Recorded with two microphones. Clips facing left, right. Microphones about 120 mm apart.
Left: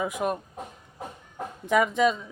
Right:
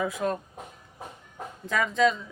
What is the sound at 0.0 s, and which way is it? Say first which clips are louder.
Speech: even; 15° left (ahead or behind).